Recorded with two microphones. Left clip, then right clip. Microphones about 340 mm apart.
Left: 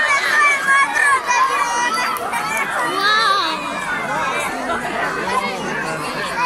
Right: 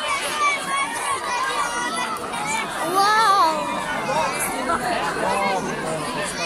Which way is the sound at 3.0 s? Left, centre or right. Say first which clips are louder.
Even; centre.